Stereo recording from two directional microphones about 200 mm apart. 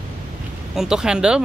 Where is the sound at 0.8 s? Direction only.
5° right (ahead or behind).